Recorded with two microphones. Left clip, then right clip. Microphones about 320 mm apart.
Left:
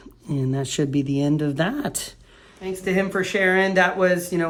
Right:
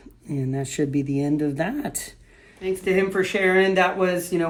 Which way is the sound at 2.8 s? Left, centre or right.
Centre.